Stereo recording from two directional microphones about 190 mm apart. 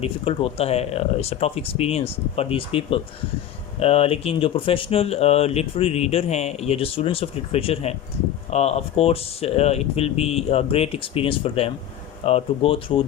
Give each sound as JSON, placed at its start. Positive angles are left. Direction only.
{"t": 0.0, "sound": "speech", "side_deg": 30}